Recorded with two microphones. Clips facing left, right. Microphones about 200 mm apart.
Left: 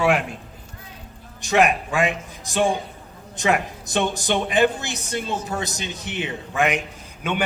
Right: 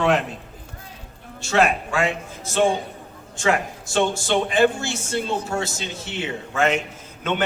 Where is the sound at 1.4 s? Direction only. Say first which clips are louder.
Left 1 dB; 15° left (ahead or behind).